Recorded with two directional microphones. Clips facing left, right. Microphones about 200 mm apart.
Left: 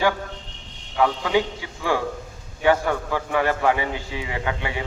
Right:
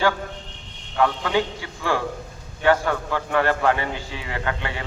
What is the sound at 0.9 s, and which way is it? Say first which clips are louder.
A man's voice: left 1 dB; 10° left (ahead or behind).